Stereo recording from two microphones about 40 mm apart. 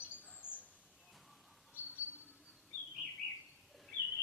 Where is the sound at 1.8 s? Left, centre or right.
Right.